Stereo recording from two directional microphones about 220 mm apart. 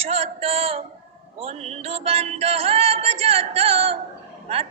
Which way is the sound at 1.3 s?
30° right (ahead or behind).